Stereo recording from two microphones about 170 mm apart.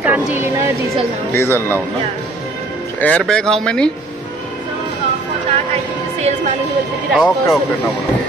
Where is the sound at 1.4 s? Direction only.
15° left (ahead or behind).